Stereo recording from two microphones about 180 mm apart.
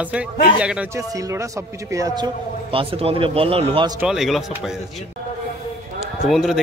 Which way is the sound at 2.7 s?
30° right (ahead or behind).